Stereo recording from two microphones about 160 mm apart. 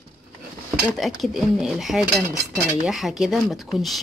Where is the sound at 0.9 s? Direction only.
Centre (ahead or behind).